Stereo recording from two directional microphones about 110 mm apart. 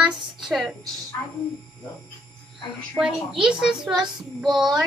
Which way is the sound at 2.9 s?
5° right (ahead or behind).